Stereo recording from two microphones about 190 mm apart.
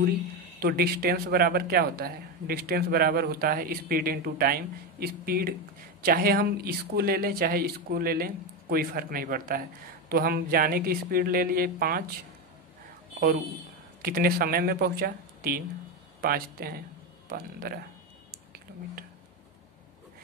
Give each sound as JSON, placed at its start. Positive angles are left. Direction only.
{"t": 0.6, "sound": "speech", "side_deg": -55}
{"t": 14.0, "sound": "speech", "side_deg": -50}